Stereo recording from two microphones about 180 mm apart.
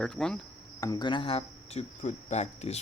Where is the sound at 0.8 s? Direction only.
25° left (ahead or behind).